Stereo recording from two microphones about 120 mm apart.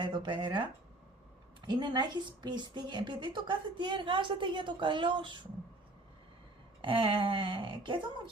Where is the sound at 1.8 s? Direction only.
40° right (ahead or behind).